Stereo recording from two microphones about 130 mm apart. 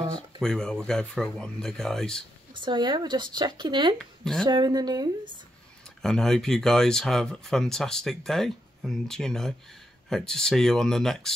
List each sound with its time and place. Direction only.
0.4 s speech: 5° left (ahead or behind)
2.5 s speech: 35° right (ahead or behind)
4.2 s speech: 5° left (ahead or behind)
4.5 s speech: 35° right (ahead or behind)
6.0 s speech: 5° left (ahead or behind)